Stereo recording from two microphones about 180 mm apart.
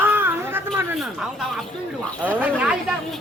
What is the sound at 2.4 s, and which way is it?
Speech, 5° right (ahead or behind).